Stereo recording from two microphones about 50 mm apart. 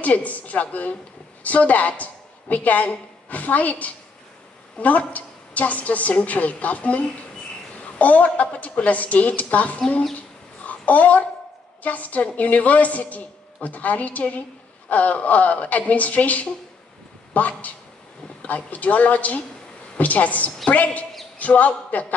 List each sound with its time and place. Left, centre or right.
0.0 s a woman's voice: left
8.0 s a woman's voice: left
10.6 s a sound: left
11.8 s a woman's voice: left